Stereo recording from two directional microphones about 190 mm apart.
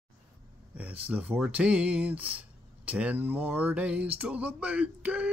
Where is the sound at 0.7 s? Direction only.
10° right (ahead or behind).